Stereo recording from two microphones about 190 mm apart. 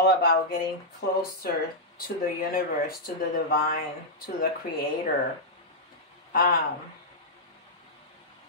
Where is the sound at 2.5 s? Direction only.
50° left (ahead or behind).